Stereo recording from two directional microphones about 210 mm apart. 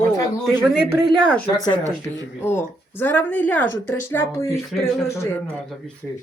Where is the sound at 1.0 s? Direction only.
5° left (ahead or behind).